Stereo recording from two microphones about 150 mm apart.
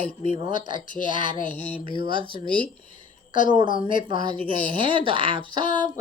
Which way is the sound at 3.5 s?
35° right (ahead or behind).